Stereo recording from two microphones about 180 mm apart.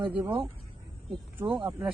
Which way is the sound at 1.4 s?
30° right (ahead or behind).